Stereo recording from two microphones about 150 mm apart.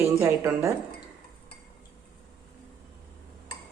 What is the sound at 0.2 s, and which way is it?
Speech, 20° right (ahead or behind).